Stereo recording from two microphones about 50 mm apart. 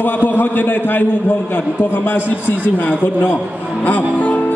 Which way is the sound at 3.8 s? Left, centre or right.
Left.